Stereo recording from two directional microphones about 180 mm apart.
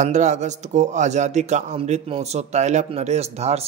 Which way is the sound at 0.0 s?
40° right (ahead or behind).